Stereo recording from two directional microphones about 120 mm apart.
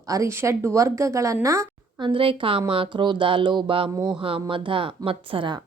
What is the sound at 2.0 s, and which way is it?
A woman's voice, 45° right (ahead or behind).